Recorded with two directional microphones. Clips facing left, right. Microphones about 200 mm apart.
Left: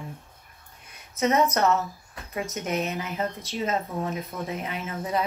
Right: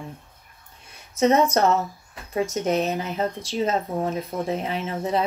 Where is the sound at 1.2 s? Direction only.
30° right (ahead or behind).